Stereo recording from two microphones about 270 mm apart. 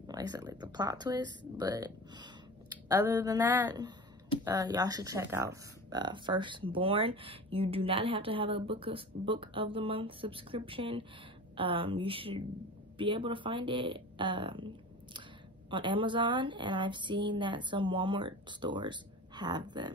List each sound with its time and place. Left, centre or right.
0.0 s a woman's voice: centre
15.7 s a woman's voice: centre